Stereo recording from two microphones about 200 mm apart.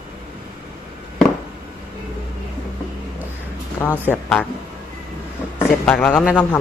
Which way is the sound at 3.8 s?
10° left (ahead or behind).